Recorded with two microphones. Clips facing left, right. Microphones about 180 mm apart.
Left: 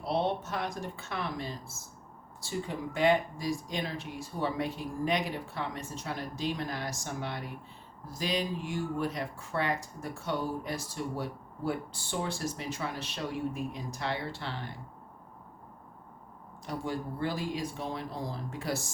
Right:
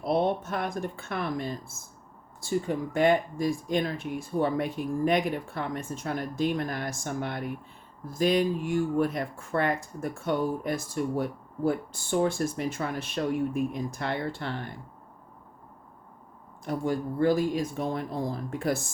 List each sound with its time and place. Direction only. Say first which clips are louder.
0.0 s speech: right 5 dB; 50° right (ahead or behind)
16.6 s speech: right 6 dB; 50° right (ahead or behind)